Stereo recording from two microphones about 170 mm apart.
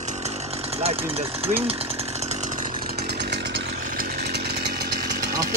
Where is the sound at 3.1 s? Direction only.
75° right (ahead or behind).